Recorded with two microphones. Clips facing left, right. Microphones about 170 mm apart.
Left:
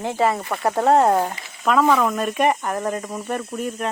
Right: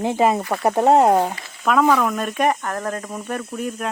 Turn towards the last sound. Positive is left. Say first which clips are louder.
# even
turn(degrees=0)  # may be behind; listen again after turning